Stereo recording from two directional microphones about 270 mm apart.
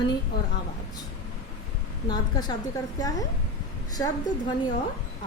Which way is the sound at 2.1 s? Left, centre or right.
Centre.